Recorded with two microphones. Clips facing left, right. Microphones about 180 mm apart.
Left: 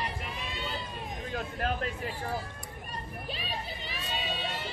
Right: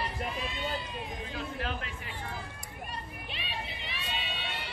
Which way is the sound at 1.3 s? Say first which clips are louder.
Left 5 dB; 45° left (ahead or behind).